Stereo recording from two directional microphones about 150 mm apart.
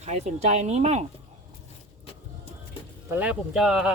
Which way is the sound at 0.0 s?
50° right (ahead or behind).